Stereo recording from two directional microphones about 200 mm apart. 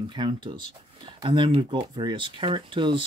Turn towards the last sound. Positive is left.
turn(degrees=-25)  # may be behind; listen again after turning